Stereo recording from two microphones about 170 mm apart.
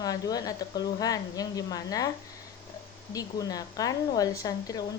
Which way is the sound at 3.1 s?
20° left (ahead or behind).